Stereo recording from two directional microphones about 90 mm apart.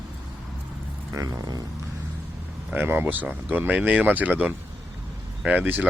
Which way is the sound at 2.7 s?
25° right (ahead or behind).